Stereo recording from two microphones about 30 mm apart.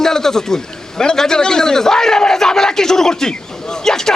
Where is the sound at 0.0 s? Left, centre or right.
Centre.